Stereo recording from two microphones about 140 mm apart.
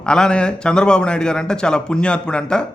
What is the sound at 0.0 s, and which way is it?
A man's voice, 5° left (ahead or behind).